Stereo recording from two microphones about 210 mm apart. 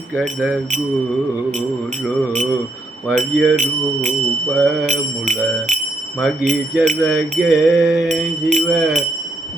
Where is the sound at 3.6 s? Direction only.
35° right (ahead or behind).